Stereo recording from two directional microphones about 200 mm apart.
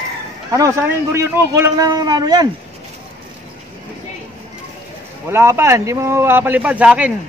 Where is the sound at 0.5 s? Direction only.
15° right (ahead or behind).